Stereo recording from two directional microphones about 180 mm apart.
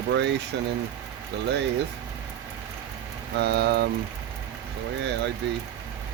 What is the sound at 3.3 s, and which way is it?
Speech, 65° right (ahead or behind).